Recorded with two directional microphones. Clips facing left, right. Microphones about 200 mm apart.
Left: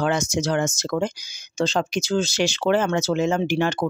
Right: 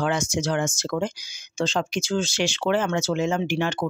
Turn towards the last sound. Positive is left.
turn(degrees=40)  # may be behind; listen again after turning